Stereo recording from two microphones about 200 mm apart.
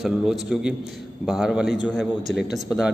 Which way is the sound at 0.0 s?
Centre (ahead or behind).